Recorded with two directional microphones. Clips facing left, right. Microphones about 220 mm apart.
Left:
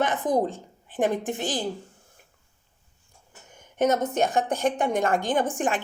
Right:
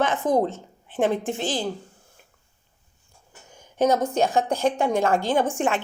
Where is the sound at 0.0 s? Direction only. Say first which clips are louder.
Right 2 dB; 15° left (ahead or behind).